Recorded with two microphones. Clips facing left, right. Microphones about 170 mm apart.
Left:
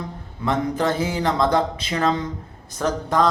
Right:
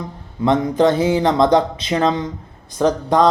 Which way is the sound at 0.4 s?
20° right (ahead or behind).